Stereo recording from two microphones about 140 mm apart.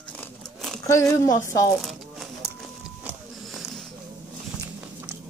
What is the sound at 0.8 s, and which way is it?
Speech, 20° left (ahead or behind).